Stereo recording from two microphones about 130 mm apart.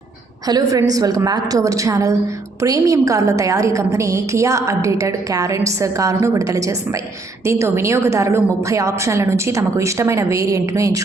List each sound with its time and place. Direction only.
0.4 s a woman's voice: 30° right (ahead or behind)